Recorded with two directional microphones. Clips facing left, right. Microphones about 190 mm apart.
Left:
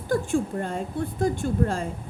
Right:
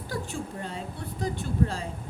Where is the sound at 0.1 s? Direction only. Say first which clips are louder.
Left 11 dB; 50° left (ahead or behind).